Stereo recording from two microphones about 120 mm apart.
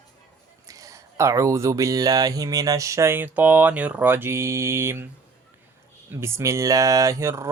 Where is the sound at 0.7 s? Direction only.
30° right (ahead or behind).